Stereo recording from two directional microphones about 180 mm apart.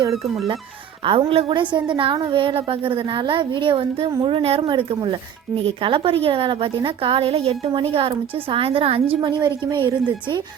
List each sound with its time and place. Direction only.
1.0 s a woman's voice: 30° right (ahead or behind)